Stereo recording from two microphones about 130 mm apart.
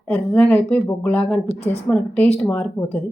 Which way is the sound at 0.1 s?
15° left (ahead or behind).